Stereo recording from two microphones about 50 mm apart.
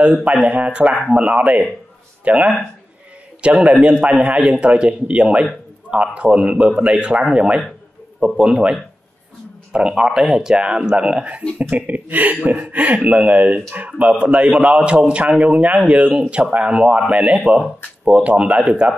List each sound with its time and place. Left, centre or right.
0.0 s speech: right
3.7 s speech: centre
9.9 s speech: centre